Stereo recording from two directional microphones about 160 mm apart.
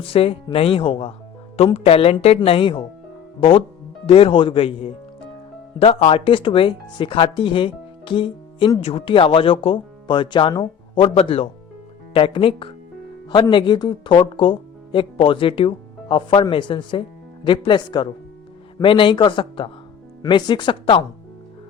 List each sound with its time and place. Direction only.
0.0 s speech: 35° left (ahead or behind)
4.0 s speech: 35° left (ahead or behind)